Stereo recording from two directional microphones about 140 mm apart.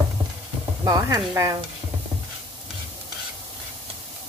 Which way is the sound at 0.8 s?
25° right (ahead or behind).